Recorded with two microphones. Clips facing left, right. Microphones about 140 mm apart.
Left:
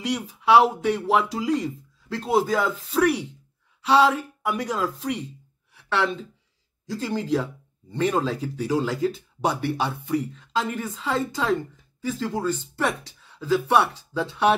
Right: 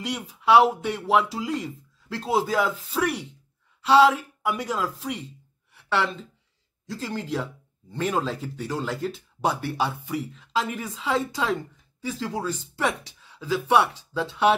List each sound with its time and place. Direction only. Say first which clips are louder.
0.0 s speech: left 2 dB; centre (ahead or behind)
5.7 s a sound: left 1 dB; centre (ahead or behind)
6.9 s speech: left 5 dB; centre (ahead or behind)